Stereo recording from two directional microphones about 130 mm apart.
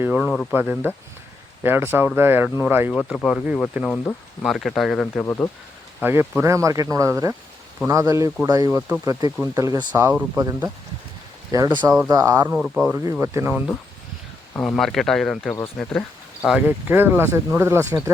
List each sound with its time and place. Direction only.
0.0 s speech: 10° right (ahead or behind)
2.9 s speech: 5° left (ahead or behind)
3.8 s speech: 5° left (ahead or behind)
5.1 s speech: 20° left (ahead or behind)
6.0 s speech: 15° right (ahead or behind)
9.9 s speech: 15° right (ahead or behind)
11.5 s speech: 30° right (ahead or behind)
12.5 s speech: 5° right (ahead or behind)
13.1 s speech: 20° right (ahead or behind)
14.6 s speech: 5° left (ahead or behind)
16.5 s speech: 10° right (ahead or behind)